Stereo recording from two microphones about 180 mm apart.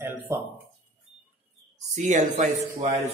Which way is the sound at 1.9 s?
40° right (ahead or behind).